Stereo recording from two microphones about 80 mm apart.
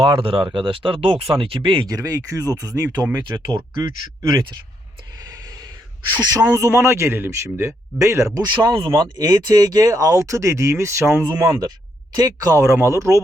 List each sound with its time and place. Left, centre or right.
0.0 s speech: right
1.9 s speech: right
3.4 s speech: right
5.2 s a sound: right
6.1 s speech: right
8.4 s speech: right
12.1 s speech: right